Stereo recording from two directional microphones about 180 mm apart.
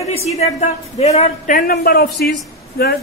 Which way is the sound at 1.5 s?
55° left (ahead or behind).